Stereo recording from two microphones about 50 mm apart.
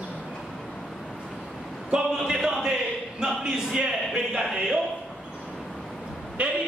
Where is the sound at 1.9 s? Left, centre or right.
Centre.